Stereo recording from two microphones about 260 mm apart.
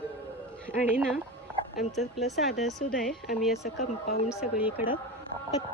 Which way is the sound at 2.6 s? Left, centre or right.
Centre.